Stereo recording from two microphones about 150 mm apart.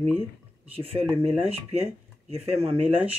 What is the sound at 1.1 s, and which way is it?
Speech, 40° right (ahead or behind).